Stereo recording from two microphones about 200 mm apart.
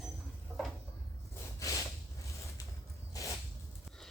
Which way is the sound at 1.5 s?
15° left (ahead or behind).